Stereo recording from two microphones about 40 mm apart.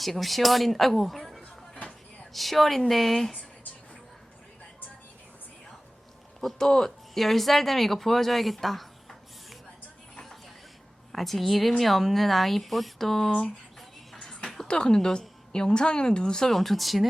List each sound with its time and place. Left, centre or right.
0.0 s speech: centre
6.4 s speech: centre
11.1 s speech: centre
13.7 s music: centre
14.7 s speech: left
16.5 s speech: centre